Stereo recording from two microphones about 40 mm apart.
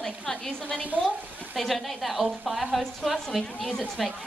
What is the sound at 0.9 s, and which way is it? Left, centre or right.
Speech, right.